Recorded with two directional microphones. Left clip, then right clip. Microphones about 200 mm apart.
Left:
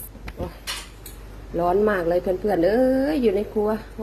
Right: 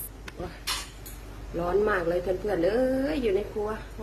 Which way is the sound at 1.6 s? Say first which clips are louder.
Left 5 dB; 25° left (ahead or behind).